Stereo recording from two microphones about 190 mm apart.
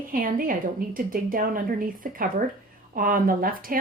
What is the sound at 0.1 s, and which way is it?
A woman's voice, 45° right (ahead or behind).